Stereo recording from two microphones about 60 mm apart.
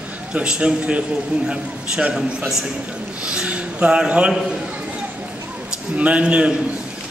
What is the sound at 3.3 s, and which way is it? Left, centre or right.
A man's voice, centre.